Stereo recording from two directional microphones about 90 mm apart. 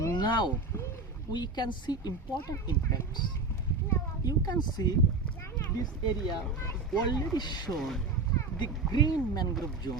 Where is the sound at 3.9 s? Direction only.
45° left (ahead or behind).